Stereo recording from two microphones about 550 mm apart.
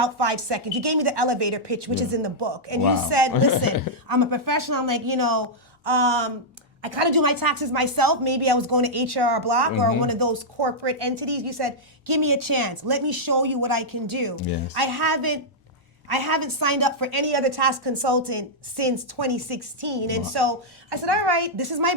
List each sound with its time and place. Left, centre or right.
0.0 s a woman's voice: right
5.8 s a woman's voice: right